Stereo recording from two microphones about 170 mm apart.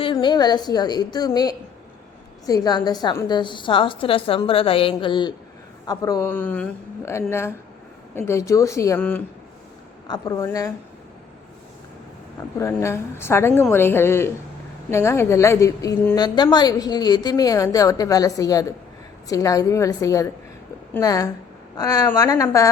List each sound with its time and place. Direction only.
0.0 s a woman's voice: 30° left (ahead or behind)
6.3 s a woman's voice: 10° left (ahead or behind)
10.1 s a woman's voice: 20° left (ahead or behind)
12.5 s a woman's voice: 15° left (ahead or behind)